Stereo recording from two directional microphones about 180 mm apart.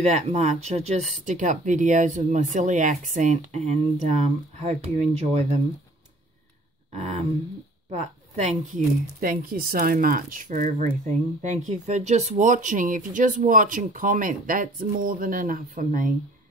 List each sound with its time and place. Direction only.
0.0 s speech: 40° right (ahead or behind)
6.9 s a sound: 40° right (ahead or behind)
7.9 s speech: 40° right (ahead or behind)